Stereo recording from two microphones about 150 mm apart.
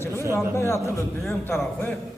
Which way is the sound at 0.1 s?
20° right (ahead or behind).